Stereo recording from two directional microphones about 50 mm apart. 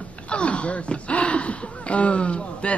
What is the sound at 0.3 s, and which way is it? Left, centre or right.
Speech, left.